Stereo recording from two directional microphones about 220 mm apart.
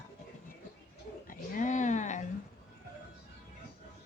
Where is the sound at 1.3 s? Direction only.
35° left (ahead or behind).